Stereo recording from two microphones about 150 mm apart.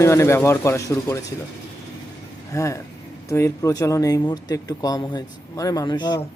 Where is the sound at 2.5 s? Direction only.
20° left (ahead or behind).